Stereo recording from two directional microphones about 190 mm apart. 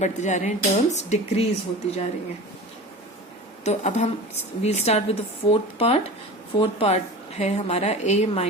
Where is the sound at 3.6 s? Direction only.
35° left (ahead or behind).